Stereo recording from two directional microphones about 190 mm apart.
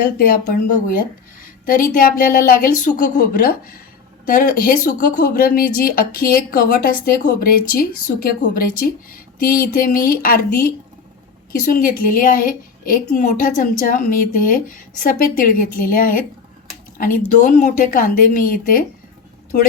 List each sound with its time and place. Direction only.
0.0 s speech: 50° left (ahead or behind)
4.3 s speech: 45° left (ahead or behind)
11.7 s speech: 50° left (ahead or behind)